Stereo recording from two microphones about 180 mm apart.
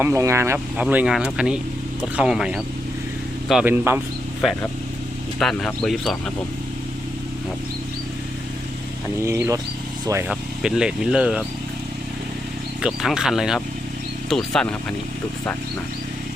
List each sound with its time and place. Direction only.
0.0 s speech: 15° right (ahead or behind); by 6.1 s centre (ahead or behind)
9.2 s speech: 15° right (ahead or behind)
10.2 s speech: 5° right (ahead or behind)
12.8 s speech: 5° right (ahead or behind)